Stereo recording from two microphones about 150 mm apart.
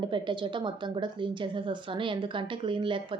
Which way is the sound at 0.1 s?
30° right (ahead or behind).